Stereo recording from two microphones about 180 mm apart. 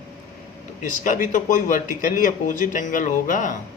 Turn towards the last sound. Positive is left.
turn(degrees=45)  # may be behind; listen again after turning